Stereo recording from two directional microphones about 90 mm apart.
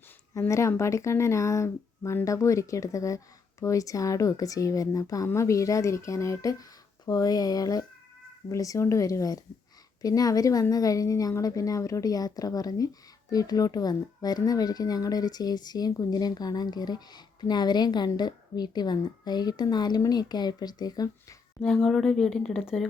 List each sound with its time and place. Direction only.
0.3 s speech: 35° left (ahead or behind)
21.6 s speech: 5° left (ahead or behind)